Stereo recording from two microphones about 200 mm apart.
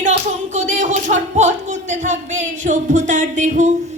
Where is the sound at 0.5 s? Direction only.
40° right (ahead or behind).